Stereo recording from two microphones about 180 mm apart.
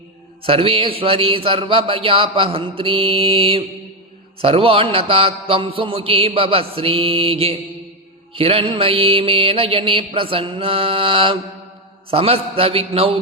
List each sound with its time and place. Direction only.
0.4 s a man's voice: 30° right (ahead or behind)
4.4 s mantra: 30° right (ahead or behind)